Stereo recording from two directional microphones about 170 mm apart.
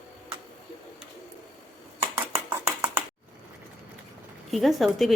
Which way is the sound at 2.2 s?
15° right (ahead or behind).